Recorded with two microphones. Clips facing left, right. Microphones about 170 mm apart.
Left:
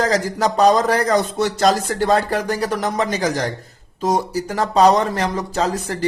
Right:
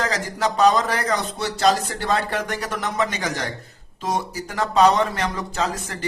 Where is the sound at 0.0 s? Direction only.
40° left (ahead or behind).